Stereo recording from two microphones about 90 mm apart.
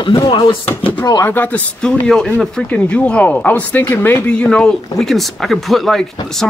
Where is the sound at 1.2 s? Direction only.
20° left (ahead or behind).